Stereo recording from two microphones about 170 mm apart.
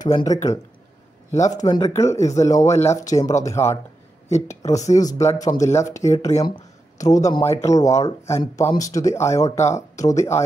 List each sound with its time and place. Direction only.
0.1 s speech: 25° left (ahead or behind)
1.5 s speech: 20° left (ahead or behind)